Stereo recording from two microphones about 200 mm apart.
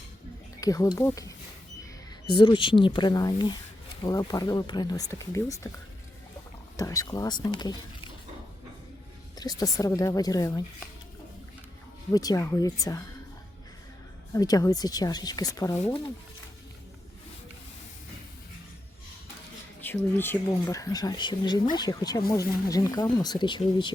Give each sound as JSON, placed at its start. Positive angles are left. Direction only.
{"t": 0.6, "sound": "speech", "side_deg": 15}
{"t": 2.3, "sound": "speech", "side_deg": 25}
{"t": 6.7, "sound": "speech", "side_deg": 15}
{"t": 9.3, "sound": "a sound", "side_deg": 20}
{"t": 9.7, "sound": "speech", "side_deg": 15}
{"t": 12.1, "sound": "speech", "side_deg": 20}
{"t": 14.3, "sound": "speech", "side_deg": 20}
{"t": 19.8, "sound": "speech", "side_deg": 10}